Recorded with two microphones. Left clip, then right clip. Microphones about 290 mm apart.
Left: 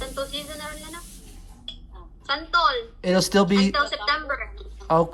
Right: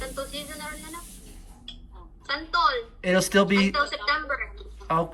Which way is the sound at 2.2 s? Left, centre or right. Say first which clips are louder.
Left 2 dB; left.